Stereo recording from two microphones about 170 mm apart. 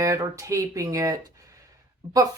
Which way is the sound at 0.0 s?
20° right (ahead or behind).